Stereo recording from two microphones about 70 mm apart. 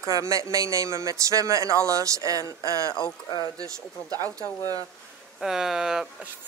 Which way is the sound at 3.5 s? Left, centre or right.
Right.